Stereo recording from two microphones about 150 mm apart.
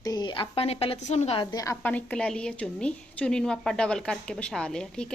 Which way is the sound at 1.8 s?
10° left (ahead or behind).